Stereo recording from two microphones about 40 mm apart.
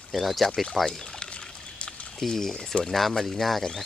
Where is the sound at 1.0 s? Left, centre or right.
Left.